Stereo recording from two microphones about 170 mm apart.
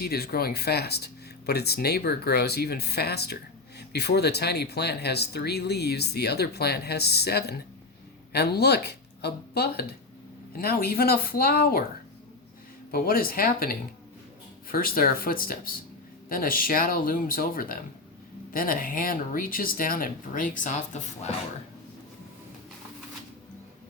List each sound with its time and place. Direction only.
0.0 s speech: 65° left (ahead or behind)
12.9 s speech: 60° left (ahead or behind)